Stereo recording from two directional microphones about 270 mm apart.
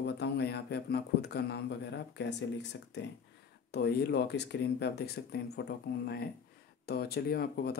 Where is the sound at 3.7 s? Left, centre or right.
Left.